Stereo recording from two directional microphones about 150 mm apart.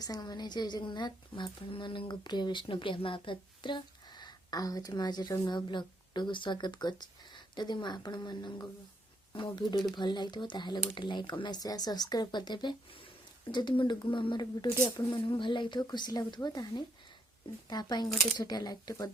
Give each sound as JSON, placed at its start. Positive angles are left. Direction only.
{"t": 0.0, "sound": "a woman's voice", "side_deg": 25}